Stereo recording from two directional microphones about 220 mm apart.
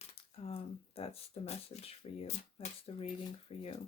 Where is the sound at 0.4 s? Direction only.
25° left (ahead or behind).